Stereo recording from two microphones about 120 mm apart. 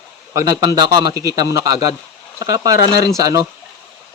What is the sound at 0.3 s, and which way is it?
A man's voice, 30° right (ahead or behind).